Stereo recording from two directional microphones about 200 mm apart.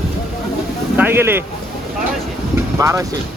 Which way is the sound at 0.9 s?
10° right (ahead or behind).